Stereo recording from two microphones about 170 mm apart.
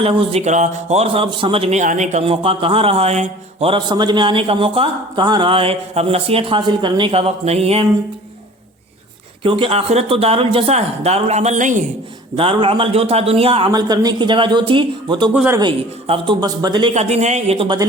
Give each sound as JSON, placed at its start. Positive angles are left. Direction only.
{"t": 0.0, "sound": "speech", "side_deg": -30}
{"t": 1.8, "sound": "speech", "side_deg": -45}
{"t": 9.4, "sound": "speech", "side_deg": -30}
{"t": 12.4, "sound": "speech", "side_deg": -30}
{"t": 13.7, "sound": "speech", "side_deg": -25}
{"t": 15.3, "sound": "a man's voice", "side_deg": -10}
{"t": 15.5, "sound": "speech", "side_deg": -30}
{"t": 16.9, "sound": "speech", "side_deg": -40}